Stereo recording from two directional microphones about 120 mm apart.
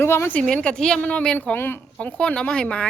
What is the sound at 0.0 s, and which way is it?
Speech, 20° left (ahead or behind).